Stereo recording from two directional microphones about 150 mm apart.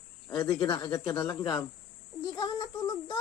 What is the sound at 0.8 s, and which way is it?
A child's voice, 20° left (ahead or behind).